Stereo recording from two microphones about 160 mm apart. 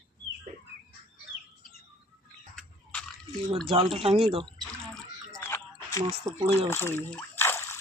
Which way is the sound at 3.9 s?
35° right (ahead or behind).